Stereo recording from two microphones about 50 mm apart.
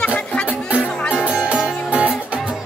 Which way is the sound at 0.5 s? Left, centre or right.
Right.